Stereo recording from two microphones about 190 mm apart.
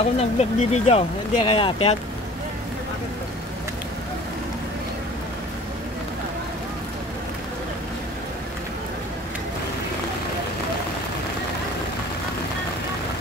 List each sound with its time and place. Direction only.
0.0 s speech: 35° left (ahead or behind)